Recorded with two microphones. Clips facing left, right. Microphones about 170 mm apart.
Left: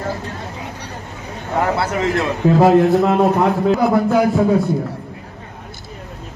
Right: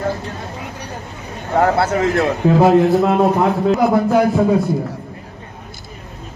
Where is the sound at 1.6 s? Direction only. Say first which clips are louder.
Right 4 dB; 60° right (ahead or behind).